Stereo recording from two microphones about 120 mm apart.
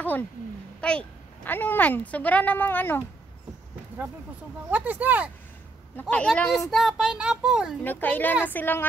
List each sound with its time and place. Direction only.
0.7 s speech: 10° left (ahead or behind)
4.6 s speech: 15° right (ahead or behind)
5.9 s speech: 10° left (ahead or behind); by 7.7 s 5° right (ahead or behind)
7.8 s speech: 15° left (ahead or behind)